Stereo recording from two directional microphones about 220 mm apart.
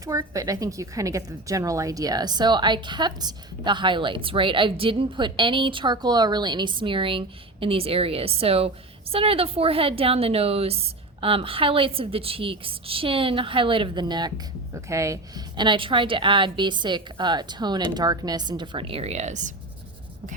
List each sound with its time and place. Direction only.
0.0 s a woman's voice: 15° right (ahead or behind); by 19.5 s 35° right (ahead or behind)